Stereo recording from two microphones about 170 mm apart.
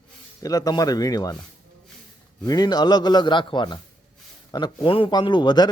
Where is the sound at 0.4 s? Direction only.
20° left (ahead or behind).